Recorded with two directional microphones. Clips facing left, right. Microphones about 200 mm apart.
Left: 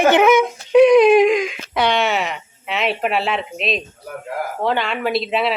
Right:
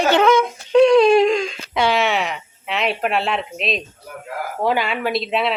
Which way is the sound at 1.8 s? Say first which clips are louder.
Even; centre (ahead or behind).